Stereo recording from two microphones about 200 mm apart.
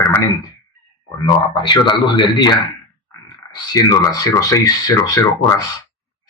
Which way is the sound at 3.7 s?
15° left (ahead or behind).